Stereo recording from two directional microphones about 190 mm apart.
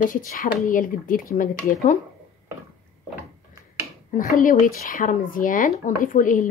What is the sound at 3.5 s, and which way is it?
Finger snapping, 15° right (ahead or behind).